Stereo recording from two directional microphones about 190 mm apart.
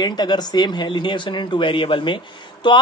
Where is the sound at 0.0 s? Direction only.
20° left (ahead or behind).